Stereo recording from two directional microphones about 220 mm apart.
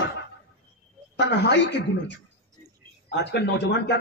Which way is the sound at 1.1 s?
55° left (ahead or behind).